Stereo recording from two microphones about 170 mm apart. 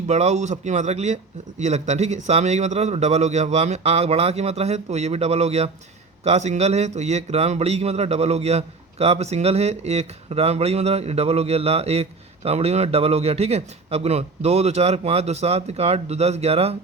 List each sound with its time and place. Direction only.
0.1 s a man's voice: 40° right (ahead or behind)